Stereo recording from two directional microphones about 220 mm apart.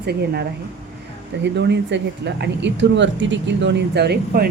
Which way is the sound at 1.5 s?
50° right (ahead or behind).